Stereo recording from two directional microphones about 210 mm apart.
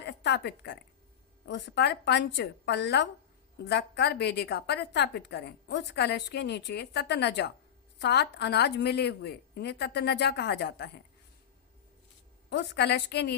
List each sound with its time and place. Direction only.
0.0 s a woman's voice: 55° left (ahead or behind)
12.5 s a woman's voice: 55° left (ahead or behind)